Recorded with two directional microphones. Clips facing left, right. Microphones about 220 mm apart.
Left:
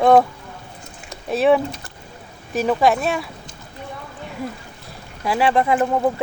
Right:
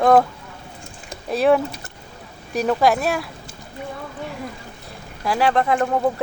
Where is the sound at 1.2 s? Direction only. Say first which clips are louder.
Left 1 dB; centre (ahead or behind).